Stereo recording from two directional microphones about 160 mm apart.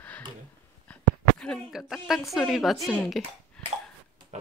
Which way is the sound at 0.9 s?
10° left (ahead or behind).